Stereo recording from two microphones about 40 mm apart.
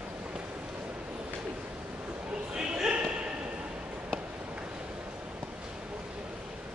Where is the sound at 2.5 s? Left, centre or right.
Centre.